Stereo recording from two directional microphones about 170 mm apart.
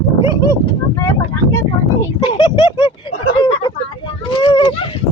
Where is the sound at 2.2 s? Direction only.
25° left (ahead or behind).